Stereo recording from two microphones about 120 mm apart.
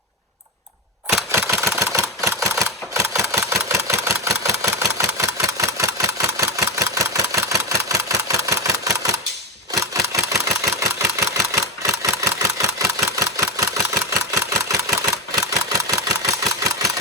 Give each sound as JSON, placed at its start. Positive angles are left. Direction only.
{"t": 1.3, "sound": "camera", "side_deg": -25}
{"t": 4.4, "sound": "engine", "side_deg": -25}